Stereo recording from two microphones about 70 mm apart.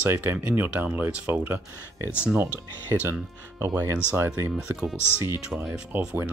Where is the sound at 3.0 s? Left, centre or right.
Right.